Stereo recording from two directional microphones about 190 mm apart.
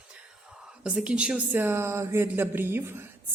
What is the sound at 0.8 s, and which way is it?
Speech, 5° right (ahead or behind).